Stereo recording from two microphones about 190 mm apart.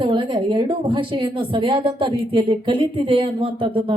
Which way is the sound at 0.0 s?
25° right (ahead or behind).